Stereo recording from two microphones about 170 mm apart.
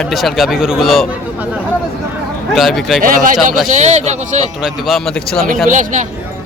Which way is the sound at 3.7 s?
45° right (ahead or behind).